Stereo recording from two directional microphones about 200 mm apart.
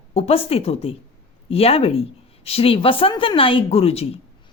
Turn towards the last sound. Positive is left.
turn(degrees=30)  # may be behind; listen again after turning